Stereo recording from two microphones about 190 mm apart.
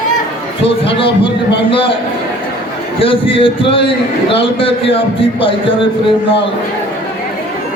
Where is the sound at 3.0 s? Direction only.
30° left (ahead or behind).